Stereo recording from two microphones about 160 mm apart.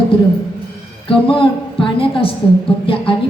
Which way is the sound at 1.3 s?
35° left (ahead or behind).